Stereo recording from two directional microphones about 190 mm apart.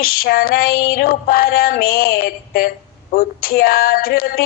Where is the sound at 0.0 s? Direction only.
50° left (ahead or behind).